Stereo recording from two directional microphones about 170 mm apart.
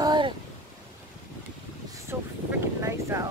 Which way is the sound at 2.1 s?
15° right (ahead or behind).